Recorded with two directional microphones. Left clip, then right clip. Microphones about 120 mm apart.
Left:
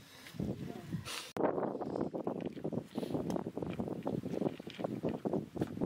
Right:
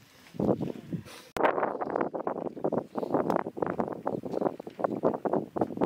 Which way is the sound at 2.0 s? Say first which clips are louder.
Right 7 dB; 40° right (ahead or behind).